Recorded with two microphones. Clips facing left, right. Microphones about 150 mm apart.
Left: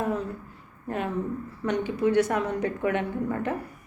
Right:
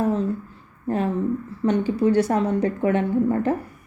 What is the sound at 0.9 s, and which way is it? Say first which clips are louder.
A woman's voice: right 6 dB; 35° right (ahead or behind).